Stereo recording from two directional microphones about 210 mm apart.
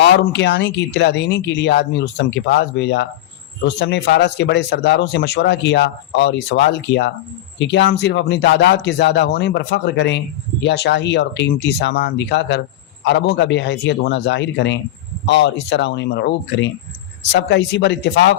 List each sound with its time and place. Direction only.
0.0 s speech: 55° left (ahead or behind)